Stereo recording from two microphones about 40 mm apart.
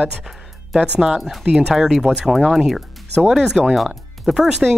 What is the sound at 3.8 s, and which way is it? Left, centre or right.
Speech, centre.